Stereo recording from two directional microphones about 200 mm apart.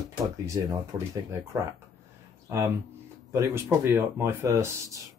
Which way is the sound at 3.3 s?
15° right (ahead or behind).